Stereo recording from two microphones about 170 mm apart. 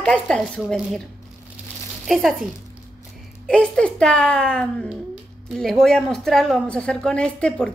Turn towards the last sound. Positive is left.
turn(degrees=5)  # may be behind; listen again after turning